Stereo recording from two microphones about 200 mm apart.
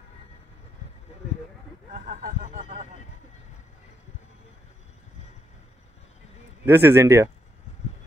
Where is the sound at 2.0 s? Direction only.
40° right (ahead or behind).